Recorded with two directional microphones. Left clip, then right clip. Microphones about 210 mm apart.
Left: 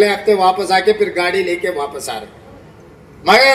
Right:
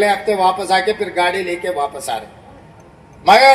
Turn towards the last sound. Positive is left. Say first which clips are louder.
# right 1 dB
turn(degrees=20)  # may be behind; listen again after turning